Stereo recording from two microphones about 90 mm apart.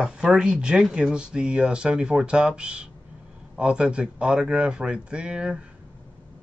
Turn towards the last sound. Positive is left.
turn(degrees=-10)  # may be behind; listen again after turning